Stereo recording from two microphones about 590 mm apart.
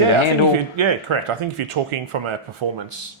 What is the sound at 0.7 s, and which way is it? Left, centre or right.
Speech, right.